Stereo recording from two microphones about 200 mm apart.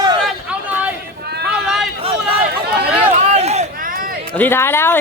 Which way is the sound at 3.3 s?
35° right (ahead or behind).